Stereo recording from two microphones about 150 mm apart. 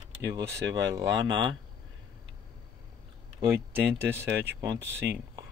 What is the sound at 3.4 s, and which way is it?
Speech, 15° right (ahead or behind).